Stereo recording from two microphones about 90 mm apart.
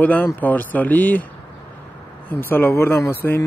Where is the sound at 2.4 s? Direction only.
25° left (ahead or behind).